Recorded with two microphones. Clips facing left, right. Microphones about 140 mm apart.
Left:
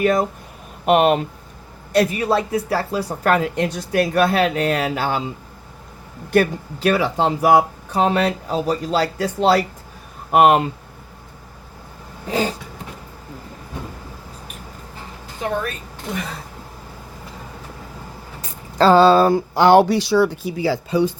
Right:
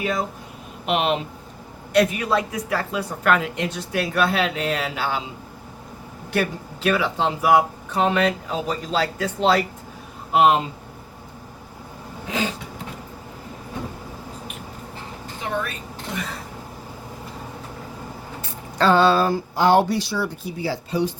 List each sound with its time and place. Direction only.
0.0 s speech: 50° left (ahead or behind)
1.9 s speech: 35° left (ahead or behind)
6.3 s speech: 45° left (ahead or behind)
10.3 s speech: 60° left (ahead or behind)
12.3 s speech: 40° left (ahead or behind)
18.8 s speech: 35° left (ahead or behind)
19.2 s speech: 65° left (ahead or behind); by 20.7 s 90° left